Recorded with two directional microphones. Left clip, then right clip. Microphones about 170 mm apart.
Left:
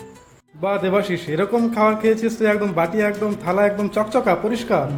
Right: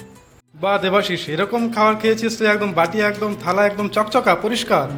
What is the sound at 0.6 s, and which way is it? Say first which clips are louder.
A man's voice: right 2 dB; 5° left (ahead or behind).